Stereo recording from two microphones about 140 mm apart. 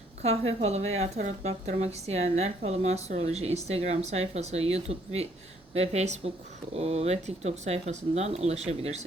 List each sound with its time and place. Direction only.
0.2 s a woman's voice: 50° right (ahead or behind)